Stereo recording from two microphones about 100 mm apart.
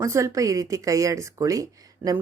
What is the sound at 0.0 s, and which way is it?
A woman's voice, 30° right (ahead or behind).